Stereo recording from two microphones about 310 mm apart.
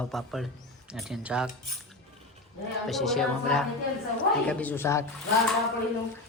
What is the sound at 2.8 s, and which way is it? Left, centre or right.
A woman's voice, centre.